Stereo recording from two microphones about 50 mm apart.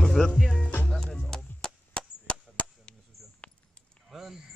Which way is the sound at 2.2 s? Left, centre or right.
Left.